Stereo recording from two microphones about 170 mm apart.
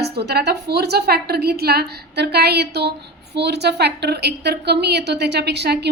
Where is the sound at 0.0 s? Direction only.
75° right (ahead or behind).